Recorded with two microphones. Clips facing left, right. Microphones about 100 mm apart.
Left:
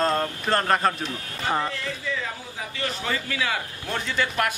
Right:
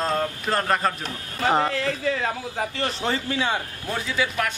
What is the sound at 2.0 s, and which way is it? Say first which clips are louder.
Speech: right 6 dB; 55° right (ahead or behind).